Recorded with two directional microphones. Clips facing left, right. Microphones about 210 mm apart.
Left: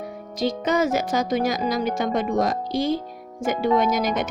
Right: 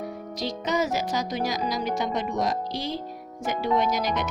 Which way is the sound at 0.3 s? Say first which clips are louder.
Left 5 dB; 50° left (ahead or behind).